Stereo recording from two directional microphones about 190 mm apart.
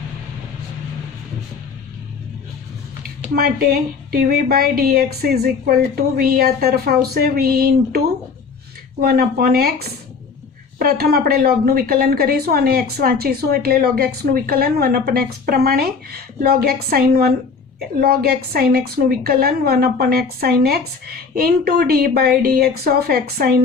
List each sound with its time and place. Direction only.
3.3 s a woman's voice: 55° right (ahead or behind)